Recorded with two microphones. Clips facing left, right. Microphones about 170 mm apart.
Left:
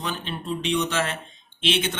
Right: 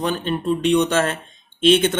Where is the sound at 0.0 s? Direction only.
50° right (ahead or behind).